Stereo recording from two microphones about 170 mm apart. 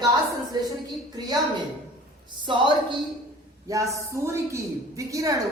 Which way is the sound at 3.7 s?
15° right (ahead or behind).